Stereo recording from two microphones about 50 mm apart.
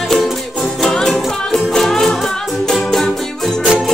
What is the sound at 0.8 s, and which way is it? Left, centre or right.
Music, centre.